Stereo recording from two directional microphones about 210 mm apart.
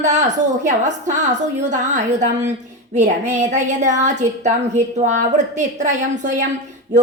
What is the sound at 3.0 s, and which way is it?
A woman's voice, 35° right (ahead or behind).